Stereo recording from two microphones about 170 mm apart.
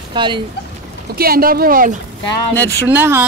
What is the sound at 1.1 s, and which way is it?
Speech, 60° right (ahead or behind).